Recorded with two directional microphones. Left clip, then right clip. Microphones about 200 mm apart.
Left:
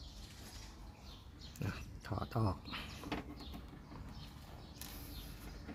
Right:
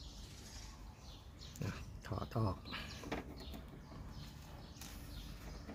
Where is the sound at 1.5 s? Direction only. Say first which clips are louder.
Left 2 dB; 10° left (ahead or behind).